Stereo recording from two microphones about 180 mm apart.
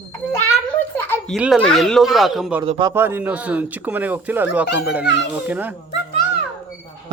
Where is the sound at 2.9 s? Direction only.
10° right (ahead or behind).